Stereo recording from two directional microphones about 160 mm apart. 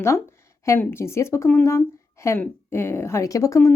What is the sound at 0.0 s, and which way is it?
Speech, 15° left (ahead or behind).